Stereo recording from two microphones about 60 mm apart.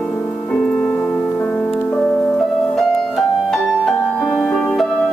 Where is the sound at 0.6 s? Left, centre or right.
Centre.